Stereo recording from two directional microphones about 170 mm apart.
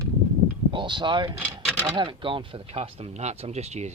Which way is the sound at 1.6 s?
5° left (ahead or behind).